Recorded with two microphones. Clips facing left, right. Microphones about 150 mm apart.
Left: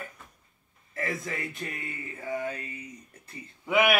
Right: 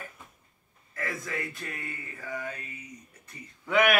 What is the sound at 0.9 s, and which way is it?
Speech, 25° left (ahead or behind).